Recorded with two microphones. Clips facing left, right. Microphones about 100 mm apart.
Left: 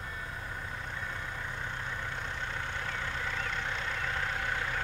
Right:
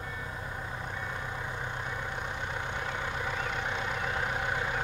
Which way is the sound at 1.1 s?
15° right (ahead or behind).